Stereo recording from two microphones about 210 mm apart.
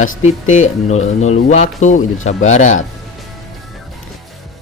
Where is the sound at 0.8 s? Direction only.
30° left (ahead or behind).